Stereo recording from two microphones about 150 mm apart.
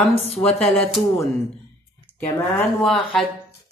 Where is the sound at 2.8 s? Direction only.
5° left (ahead or behind).